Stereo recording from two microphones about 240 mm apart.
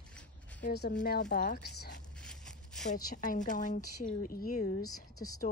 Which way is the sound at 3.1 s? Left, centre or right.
Left.